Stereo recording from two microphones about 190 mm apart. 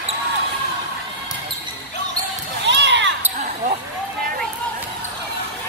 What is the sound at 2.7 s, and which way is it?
Basketball bounce, 65° right (ahead or behind).